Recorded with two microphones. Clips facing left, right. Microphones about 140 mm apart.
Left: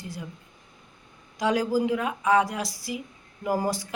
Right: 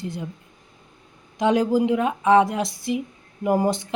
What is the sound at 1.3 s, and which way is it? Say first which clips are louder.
Speech: right 5 dB; 25° right (ahead or behind).